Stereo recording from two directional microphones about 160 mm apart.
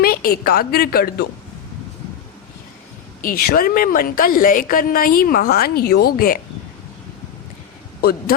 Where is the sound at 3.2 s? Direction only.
65° left (ahead or behind).